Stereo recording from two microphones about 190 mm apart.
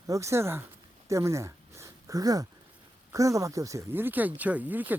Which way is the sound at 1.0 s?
15° right (ahead or behind).